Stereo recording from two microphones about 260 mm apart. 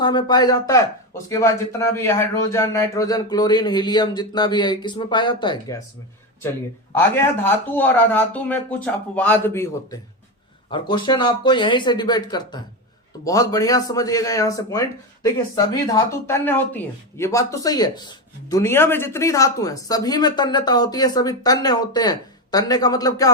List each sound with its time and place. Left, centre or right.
0.0 s a man's voice: centre
6.9 s a man's voice: centre